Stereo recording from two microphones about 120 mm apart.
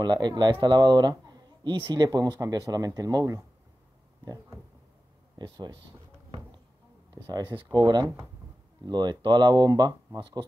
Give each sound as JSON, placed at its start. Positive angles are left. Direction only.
{"t": 0.0, "sound": "speech", "side_deg": -35}
{"t": 7.2, "sound": "speech", "side_deg": -35}